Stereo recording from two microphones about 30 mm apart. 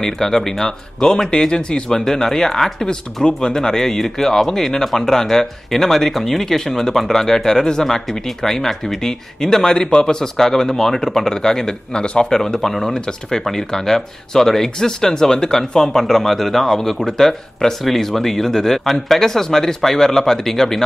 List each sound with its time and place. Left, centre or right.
0.0 s speech: centre
1.5 s speech: left
1.9 s speech: centre
11.9 s speech: left
12.4 s speech: centre
12.9 s speech: left